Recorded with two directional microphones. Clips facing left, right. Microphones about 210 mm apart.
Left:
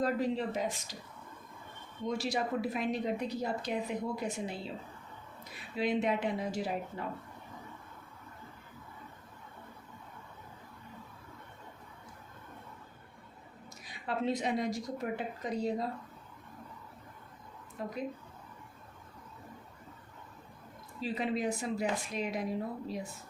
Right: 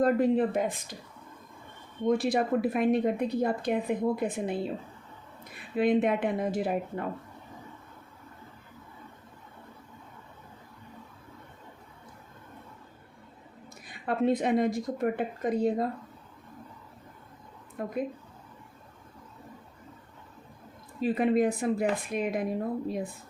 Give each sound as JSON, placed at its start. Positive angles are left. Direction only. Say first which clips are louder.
{"t": 0.0, "sound": "a woman's voice", "louder": "right 8 dB", "side_deg": -55}
{"t": 2.0, "sound": "a woman's voice", "louder": "right 8 dB", "side_deg": -55}
{"t": 13.8, "sound": "a woman's voice", "louder": "right 7 dB", "side_deg": -55}
{"t": 17.8, "sound": "speech", "louder": "right 4 dB", "side_deg": -55}
{"t": 21.0, "sound": "a woman's voice", "louder": "right 9 dB", "side_deg": -55}